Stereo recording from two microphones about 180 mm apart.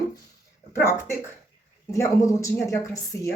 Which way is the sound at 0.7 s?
15° left (ahead or behind).